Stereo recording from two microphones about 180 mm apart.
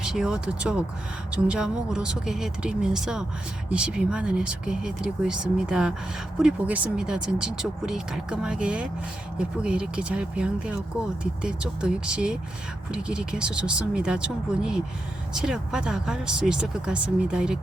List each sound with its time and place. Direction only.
0.0 s speech: 5° right (ahead or behind)